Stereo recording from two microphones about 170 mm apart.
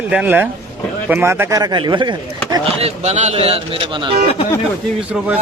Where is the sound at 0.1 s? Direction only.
10° right (ahead or behind); by 2.1 s 25° right (ahead or behind).